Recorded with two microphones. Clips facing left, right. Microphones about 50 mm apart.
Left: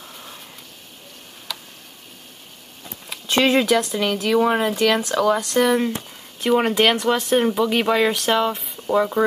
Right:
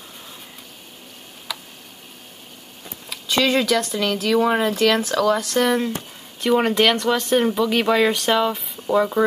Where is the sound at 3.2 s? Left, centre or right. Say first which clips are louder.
Left 1 dB; left.